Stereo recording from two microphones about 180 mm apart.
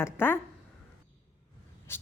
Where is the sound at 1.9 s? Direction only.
15° left (ahead or behind).